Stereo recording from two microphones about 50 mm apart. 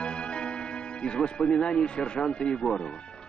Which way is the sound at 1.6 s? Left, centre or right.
Centre.